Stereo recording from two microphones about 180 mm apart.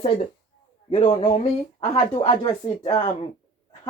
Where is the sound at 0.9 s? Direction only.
30° left (ahead or behind).